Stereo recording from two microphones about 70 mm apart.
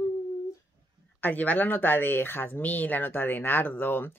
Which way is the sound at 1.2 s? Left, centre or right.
Left.